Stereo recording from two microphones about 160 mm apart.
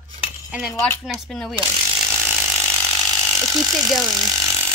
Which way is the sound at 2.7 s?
15° right (ahead or behind).